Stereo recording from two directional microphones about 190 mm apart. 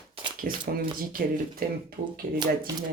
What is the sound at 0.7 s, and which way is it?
Speech, 50° right (ahead or behind).